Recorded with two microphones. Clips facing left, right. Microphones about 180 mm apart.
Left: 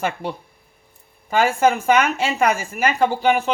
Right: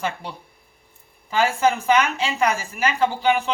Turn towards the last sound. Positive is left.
turn(degrees=50)  # may be behind; listen again after turning